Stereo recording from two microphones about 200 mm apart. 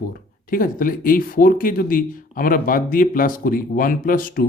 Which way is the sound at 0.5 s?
45° left (ahead or behind).